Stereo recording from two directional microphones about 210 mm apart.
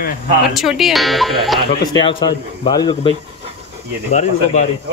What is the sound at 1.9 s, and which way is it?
Speech, 20° left (ahead or behind).